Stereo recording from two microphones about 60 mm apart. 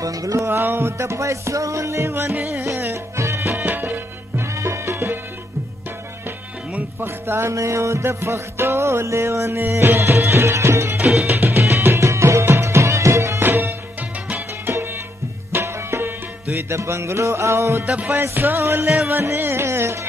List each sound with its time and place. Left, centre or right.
0.0 s music: right
0.5 s music: right
3.5 s music: right
4.6 s music: right
7.1 s music: right
7.5 s music: right
11.2 s music: right
11.6 s music: right
13.4 s music: right
14.7 s tabla: right
15.5 s music: right
17.8 s music: right
18.1 s music: right